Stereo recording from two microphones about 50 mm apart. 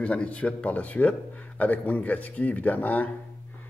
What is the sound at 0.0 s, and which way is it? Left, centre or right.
Speech, left.